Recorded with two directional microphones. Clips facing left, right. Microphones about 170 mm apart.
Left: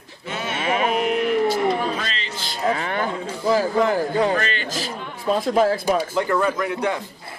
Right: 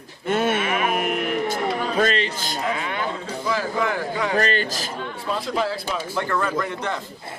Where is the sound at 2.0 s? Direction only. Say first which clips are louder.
Right 9 dB; 50° right (ahead or behind).